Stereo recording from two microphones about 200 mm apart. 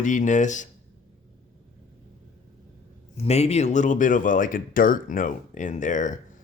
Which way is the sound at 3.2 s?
30° left (ahead or behind).